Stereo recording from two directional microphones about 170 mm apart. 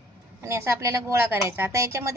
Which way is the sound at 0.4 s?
15° right (ahead or behind).